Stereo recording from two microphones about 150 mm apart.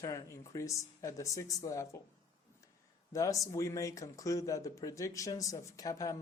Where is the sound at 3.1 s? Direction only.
20° left (ahead or behind).